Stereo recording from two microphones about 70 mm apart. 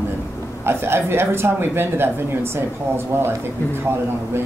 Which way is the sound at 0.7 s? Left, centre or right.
Right.